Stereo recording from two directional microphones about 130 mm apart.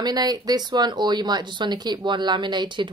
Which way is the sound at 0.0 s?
30° right (ahead or behind).